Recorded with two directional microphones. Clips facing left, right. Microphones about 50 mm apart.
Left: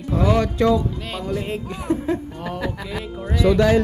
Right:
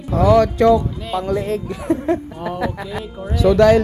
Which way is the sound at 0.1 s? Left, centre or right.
Right.